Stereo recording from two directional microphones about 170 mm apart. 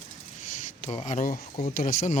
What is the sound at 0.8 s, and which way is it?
Speech, 45° left (ahead or behind).